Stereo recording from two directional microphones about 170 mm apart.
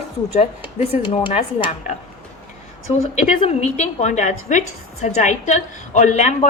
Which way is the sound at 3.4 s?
40° left (ahead or behind).